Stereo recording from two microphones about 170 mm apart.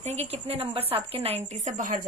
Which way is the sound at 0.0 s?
40° right (ahead or behind).